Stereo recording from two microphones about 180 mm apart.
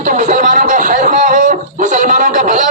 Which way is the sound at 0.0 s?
45° right (ahead or behind).